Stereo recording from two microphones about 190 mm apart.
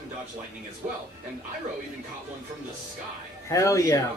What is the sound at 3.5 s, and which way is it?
Speech, 15° left (ahead or behind).